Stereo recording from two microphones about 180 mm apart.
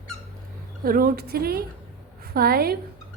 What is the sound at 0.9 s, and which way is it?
A woman's voice, 55° right (ahead or behind).